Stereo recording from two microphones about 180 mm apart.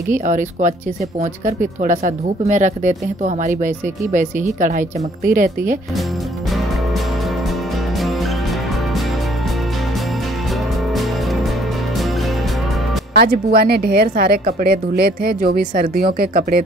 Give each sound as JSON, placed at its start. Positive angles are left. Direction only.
{"t": 0.1, "sound": "speech", "side_deg": -45}
{"t": 13.2, "sound": "a woman's voice", "side_deg": -60}